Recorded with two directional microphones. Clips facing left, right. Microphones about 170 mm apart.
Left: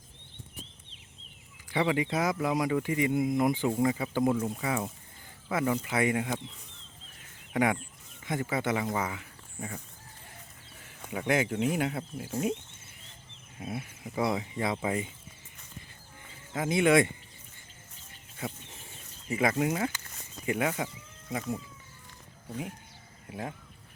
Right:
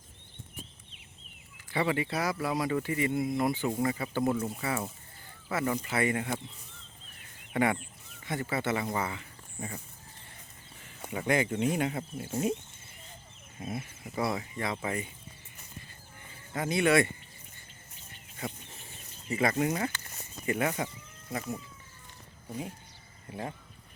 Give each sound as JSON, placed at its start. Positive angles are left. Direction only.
{"t": 1.5, "sound": "speech", "side_deg": 15}
{"t": 4.4, "sound": "speech", "side_deg": -5}
{"t": 5.5, "sound": "speech", "side_deg": 10}
{"t": 7.5, "sound": "speech", "side_deg": 0}
{"t": 8.2, "sound": "speech", "side_deg": 15}
{"t": 11.1, "sound": "speech", "side_deg": 5}
{"t": 13.6, "sound": "speech", "side_deg": 10}
{"t": 16.6, "sound": "speech", "side_deg": 20}
{"t": 18.3, "sound": "a sound", "side_deg": 10}
{"t": 20.5, "sound": "speech", "side_deg": 10}
{"t": 23.3, "sound": "speech", "side_deg": 5}